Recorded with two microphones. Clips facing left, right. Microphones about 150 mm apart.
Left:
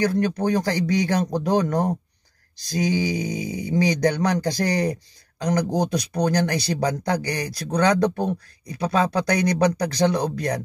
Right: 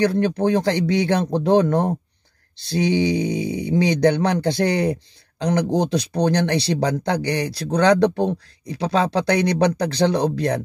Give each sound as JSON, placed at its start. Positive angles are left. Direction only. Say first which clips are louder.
{"t": 0.0, "sound": "speech", "louder": "right 3 dB", "side_deg": -25}